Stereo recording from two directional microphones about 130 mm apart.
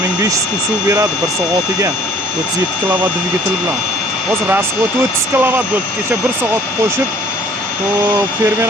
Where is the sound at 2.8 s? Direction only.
15° right (ahead or behind).